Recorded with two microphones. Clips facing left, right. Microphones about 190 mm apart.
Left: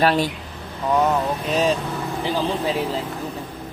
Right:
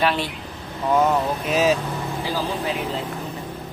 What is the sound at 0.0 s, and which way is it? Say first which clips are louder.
Speech: left 3 dB; 40° left (ahead or behind).